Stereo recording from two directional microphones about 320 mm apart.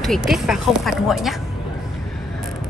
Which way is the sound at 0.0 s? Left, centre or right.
Centre.